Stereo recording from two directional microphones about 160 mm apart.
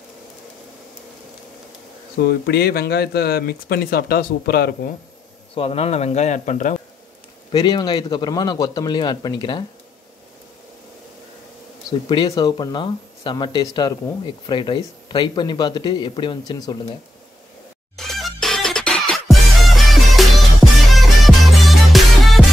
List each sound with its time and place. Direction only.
2.2 s speech: 85° left
5.5 s a man's voice: 35° left (ahead or behind)
7.5 s speech: 25° left (ahead or behind)
12.1 s speech: 30° left (ahead or behind)
17.9 s music: centre (ahead or behind)